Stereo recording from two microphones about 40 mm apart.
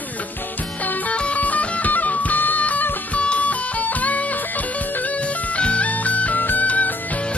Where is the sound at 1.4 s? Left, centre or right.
Left.